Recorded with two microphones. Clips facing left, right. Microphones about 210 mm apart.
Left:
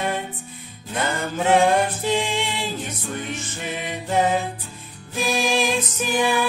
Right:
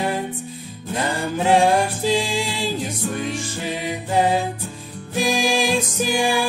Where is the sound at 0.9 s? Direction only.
30° right (ahead or behind).